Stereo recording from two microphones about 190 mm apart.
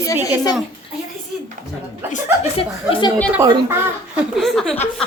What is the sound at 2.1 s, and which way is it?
Speech, 35° left (ahead or behind).